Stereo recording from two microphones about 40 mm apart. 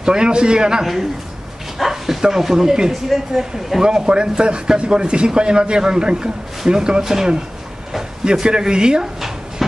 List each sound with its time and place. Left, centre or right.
0.0 s speech: centre
3.8 s speech: right
8.3 s speech: centre
9.0 s drawer open or close: centre